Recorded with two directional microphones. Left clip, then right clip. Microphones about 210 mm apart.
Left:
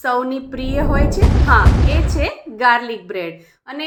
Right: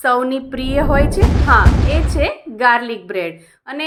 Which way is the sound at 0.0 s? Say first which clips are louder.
Right 3 dB; 15° right (ahead or behind).